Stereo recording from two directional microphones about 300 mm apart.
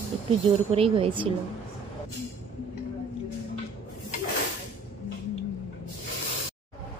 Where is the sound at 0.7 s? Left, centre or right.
Centre.